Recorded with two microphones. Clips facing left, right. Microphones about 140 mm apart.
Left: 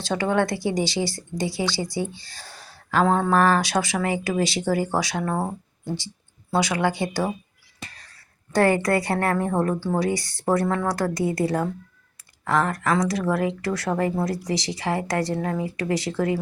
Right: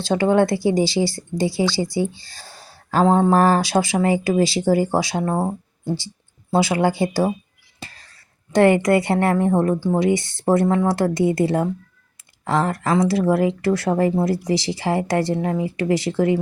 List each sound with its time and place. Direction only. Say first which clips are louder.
0.0 s speech: right 6 dB; 25° right (ahead or behind)
7.8 s whispering: right 2 dB; 30° right (ahead or behind)
8.5 s speech: right 5 dB; 20° right (ahead or behind)